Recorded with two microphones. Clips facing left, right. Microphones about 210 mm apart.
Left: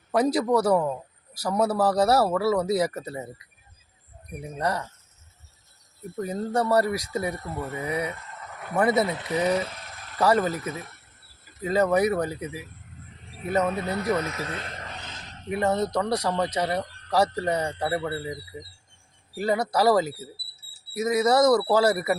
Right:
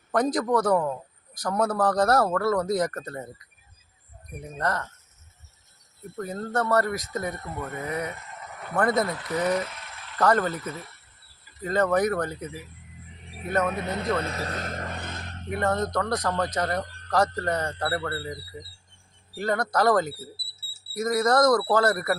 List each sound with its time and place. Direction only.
0.1 s a man's voice: 10° left (ahead or behind)
6.1 s a man's voice: 15° left (ahead or behind)
9.6 s a sound: 35° left (ahead or behind)
10.2 s a man's voice: 10° left (ahead or behind)
13.8 s speech: 20° right (ahead or behind)
14.2 s a sound: 35° right (ahead or behind); by 15.4 s 55° right (ahead or behind)
15.4 s a man's voice: 10° left (ahead or behind)
19.4 s a man's voice: 10° left (ahead or behind)